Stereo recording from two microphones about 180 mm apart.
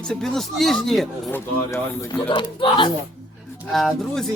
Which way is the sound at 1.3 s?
15° left (ahead or behind).